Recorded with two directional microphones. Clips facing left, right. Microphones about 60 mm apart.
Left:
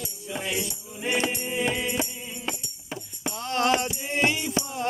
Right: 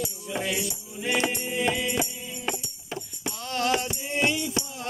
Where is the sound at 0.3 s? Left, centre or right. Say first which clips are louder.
Right 2 dB; centre.